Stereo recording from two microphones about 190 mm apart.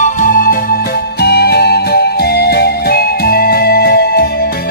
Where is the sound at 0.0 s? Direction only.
45° left (ahead or behind).